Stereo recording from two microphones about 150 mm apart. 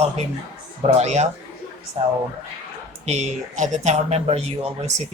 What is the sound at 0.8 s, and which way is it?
Speech, 45° right (ahead or behind).